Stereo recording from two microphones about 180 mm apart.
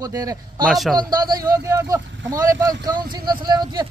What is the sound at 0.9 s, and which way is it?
Speech, 20° right (ahead or behind).